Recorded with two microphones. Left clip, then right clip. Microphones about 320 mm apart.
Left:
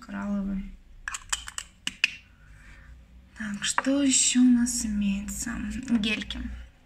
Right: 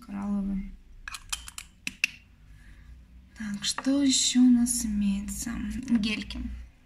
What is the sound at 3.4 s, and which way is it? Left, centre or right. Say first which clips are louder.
A woman's voice: left 4 dB; centre.